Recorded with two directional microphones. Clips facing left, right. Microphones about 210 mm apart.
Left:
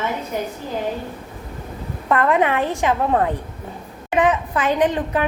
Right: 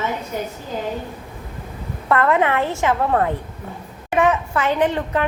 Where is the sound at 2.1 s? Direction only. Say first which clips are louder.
Even; 15° left (ahead or behind).